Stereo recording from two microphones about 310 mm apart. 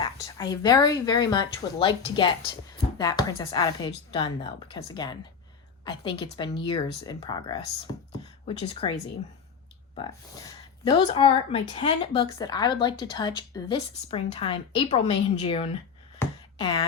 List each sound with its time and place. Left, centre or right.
0.0 s speech: centre
9.9 s speech: centre
16.1 s a sound: centre